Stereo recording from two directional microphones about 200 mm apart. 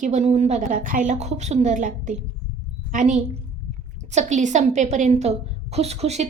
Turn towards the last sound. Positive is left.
turn(degrees=-30)  # may be behind; listen again after turning